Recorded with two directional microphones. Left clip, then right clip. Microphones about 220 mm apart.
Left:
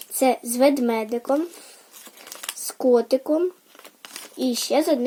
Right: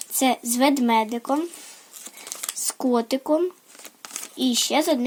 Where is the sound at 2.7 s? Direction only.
35° right (ahead or behind).